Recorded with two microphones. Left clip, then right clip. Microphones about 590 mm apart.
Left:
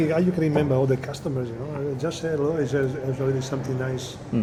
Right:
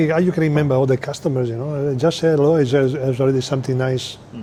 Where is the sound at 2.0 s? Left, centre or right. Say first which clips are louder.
Right 11 dB; right.